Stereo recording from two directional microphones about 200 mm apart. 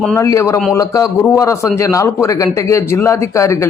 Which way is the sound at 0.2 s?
15° left (ahead or behind).